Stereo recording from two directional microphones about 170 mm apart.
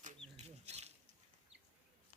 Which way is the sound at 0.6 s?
40° right (ahead or behind).